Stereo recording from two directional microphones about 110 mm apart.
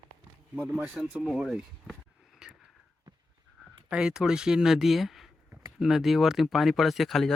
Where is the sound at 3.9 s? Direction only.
5° right (ahead or behind).